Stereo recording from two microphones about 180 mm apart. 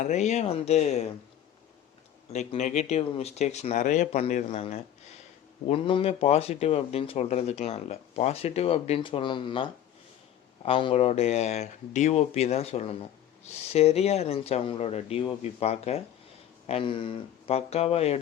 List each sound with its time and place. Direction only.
0.0 s speech: 40° left (ahead or behind)
2.3 s speech: 40° left (ahead or behind)